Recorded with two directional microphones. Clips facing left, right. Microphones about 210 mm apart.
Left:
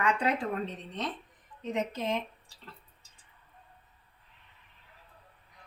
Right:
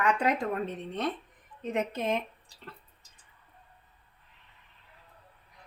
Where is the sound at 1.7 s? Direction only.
55° right (ahead or behind).